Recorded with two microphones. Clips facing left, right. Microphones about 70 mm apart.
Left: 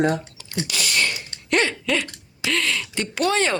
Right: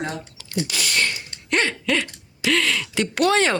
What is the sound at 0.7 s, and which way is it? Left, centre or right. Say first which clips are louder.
Speech: even; right.